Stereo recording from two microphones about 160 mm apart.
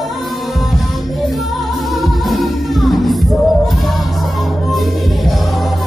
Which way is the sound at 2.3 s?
Centre (ahead or behind).